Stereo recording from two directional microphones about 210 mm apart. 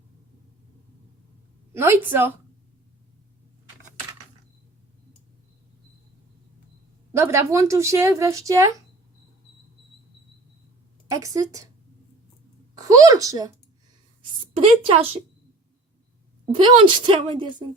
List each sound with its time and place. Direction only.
1.7 s speech: 10° right (ahead or behind)
7.1 s speech: 10° right (ahead or behind)
11.1 s speech: 15° right (ahead or behind)
12.8 s a woman's voice: 15° right (ahead or behind)
14.6 s a woman's voice: 25° right (ahead or behind)
16.5 s a woman's voice: 25° right (ahead or behind)